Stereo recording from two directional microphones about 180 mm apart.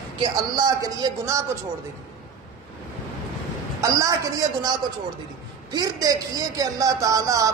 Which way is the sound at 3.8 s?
20° right (ahead or behind).